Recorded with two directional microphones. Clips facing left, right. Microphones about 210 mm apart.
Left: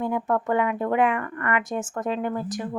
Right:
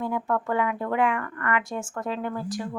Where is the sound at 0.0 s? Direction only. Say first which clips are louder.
Left 2 dB; 20° left (ahead or behind).